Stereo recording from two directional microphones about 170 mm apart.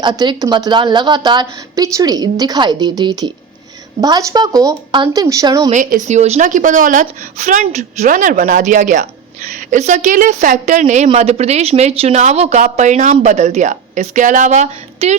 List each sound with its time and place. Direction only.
0.0 s a woman's voice: 25° right (ahead or behind)
5.7 s a woman's voice: 50° right (ahead or behind)